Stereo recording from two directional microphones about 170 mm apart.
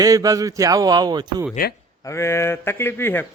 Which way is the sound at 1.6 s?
60° left (ahead or behind).